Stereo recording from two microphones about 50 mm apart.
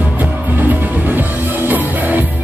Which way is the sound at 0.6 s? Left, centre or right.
Right.